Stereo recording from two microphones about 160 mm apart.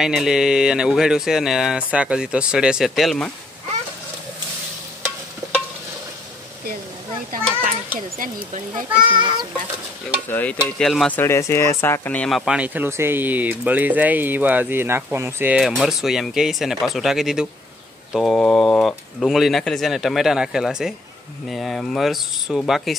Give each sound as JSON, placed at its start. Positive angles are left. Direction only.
{"t": 0.0, "sound": "speech", "side_deg": -5}
{"t": 9.1, "sound": "a child's voice", "side_deg": -30}
{"t": 10.3, "sound": "stir", "side_deg": 10}
{"t": 10.8, "sound": "speech", "side_deg": 0}
{"t": 11.1, "sound": "speech", "side_deg": 15}